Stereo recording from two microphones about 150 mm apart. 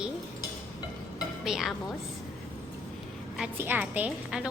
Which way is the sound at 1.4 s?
5° right (ahead or behind).